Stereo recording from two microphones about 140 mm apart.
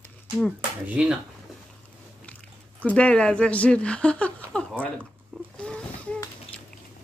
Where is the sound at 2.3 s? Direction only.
10° left (ahead or behind).